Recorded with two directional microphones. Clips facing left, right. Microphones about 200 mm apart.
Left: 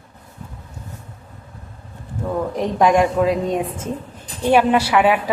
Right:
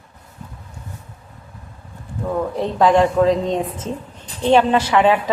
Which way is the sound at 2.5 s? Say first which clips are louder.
Right 1 dB; 15° left (ahead or behind).